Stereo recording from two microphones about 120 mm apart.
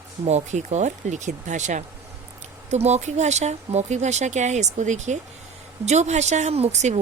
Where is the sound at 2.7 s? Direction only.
70° right (ahead or behind).